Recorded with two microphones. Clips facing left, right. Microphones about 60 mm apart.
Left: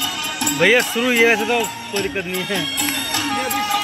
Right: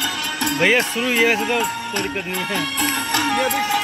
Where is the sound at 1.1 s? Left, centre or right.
Centre.